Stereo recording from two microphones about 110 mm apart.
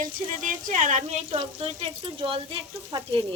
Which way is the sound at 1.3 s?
65° right (ahead or behind).